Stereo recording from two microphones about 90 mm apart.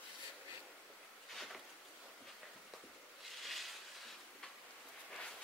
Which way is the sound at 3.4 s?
Centre (ahead or behind).